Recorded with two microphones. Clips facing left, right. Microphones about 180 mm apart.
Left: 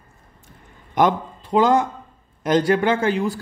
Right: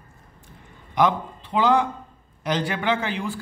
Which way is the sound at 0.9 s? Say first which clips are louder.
Left 3 dB; 45° left (ahead or behind).